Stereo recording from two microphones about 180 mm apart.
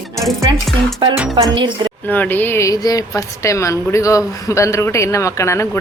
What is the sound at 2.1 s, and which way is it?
A woman's voice, 10° left (ahead or behind).